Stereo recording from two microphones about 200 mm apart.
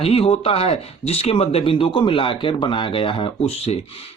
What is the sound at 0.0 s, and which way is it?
Speech, 30° left (ahead or behind).